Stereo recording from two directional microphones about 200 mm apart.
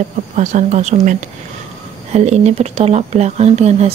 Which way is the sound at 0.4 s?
35° right (ahead or behind).